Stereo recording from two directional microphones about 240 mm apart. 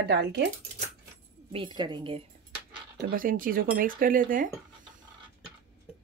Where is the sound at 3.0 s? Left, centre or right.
Right.